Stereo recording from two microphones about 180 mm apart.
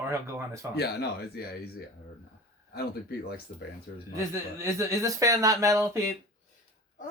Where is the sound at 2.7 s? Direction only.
60° left (ahead or behind).